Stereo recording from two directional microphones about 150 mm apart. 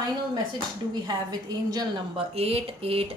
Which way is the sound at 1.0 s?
25° right (ahead or behind).